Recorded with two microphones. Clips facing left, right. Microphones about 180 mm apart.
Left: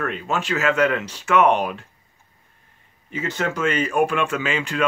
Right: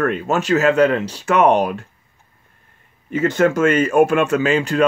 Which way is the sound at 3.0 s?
50° right (ahead or behind).